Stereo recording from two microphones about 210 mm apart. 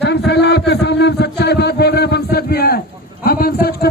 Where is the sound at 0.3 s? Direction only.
50° left (ahead or behind).